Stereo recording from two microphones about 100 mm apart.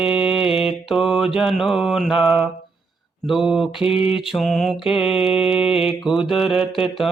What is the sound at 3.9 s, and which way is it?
Mantra, 70° left (ahead or behind).